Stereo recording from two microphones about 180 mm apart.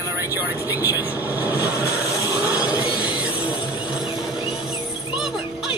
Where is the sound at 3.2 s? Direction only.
10° right (ahead or behind).